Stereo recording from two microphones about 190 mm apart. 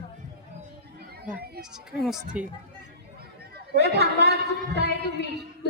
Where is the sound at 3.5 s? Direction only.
60° right (ahead or behind).